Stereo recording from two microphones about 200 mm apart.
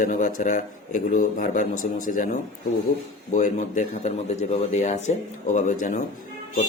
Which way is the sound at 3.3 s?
40° left (ahead or behind).